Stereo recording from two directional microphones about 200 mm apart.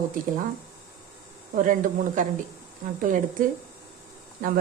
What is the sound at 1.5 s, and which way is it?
Speech, 40° right (ahead or behind).